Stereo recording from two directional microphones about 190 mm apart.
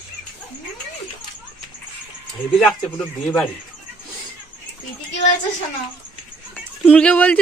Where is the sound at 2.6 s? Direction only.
5° left (ahead or behind).